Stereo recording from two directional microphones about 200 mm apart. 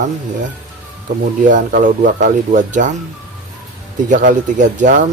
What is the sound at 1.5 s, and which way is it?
Speech, 40° right (ahead or behind).